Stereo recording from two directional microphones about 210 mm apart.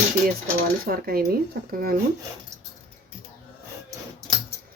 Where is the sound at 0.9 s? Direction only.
45° right (ahead or behind).